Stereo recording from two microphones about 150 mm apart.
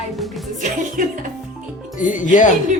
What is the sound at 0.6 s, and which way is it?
Music, 60° right (ahead or behind).